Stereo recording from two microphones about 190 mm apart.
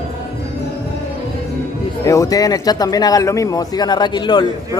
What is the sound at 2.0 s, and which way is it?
Speech, 15° left (ahead or behind).